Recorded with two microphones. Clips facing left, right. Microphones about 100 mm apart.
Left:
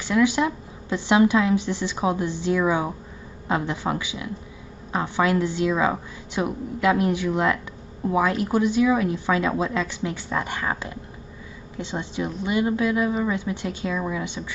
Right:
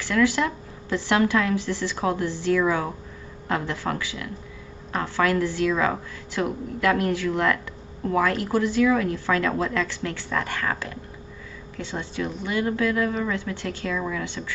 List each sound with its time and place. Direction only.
0.0 s a woman's voice: 20° left (ahead or behind)